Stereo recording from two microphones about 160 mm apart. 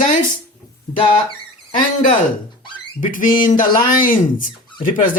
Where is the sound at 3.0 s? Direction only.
55° left (ahead or behind).